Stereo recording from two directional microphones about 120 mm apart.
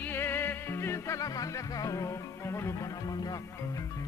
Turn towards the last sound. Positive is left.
turn(degrees=30)  # may be behind; listen again after turning